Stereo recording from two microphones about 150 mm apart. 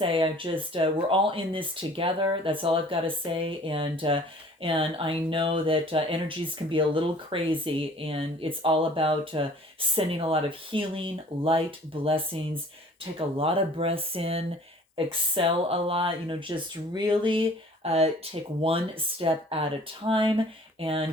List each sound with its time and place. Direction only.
0.0 s speech: 35° right (ahead or behind)
17.8 s speech: 45° right (ahead or behind)